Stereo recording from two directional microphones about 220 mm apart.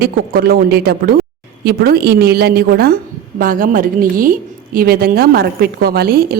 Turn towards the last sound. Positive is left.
turn(degrees=-45)  # may be behind; listen again after turning